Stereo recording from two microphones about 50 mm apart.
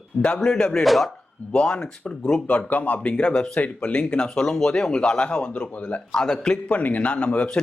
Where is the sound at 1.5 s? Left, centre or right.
Centre.